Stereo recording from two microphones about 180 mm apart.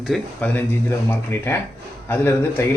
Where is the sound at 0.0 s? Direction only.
Centre (ahead or behind).